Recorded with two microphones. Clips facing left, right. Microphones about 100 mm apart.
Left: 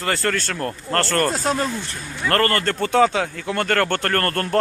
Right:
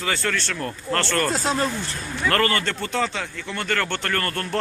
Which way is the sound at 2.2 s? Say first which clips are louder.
Left 2 dB; 40° left (ahead or behind).